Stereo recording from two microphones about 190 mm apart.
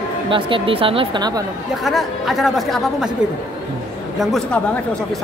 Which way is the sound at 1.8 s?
Centre (ahead or behind).